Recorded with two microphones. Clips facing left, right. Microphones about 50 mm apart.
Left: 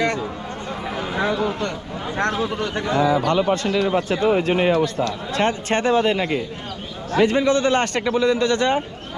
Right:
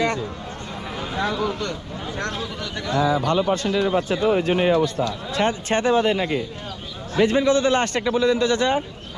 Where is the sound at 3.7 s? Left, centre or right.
Left.